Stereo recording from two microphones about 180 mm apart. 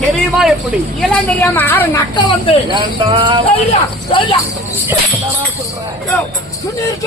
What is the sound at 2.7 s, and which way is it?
Speech, 25° right (ahead or behind).